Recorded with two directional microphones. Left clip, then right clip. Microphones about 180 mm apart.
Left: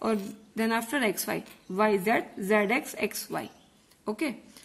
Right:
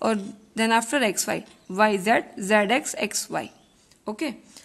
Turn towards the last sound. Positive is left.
turn(degrees=-20)  # may be behind; listen again after turning